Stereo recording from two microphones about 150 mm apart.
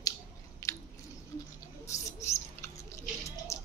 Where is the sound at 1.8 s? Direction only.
20° left (ahead or behind).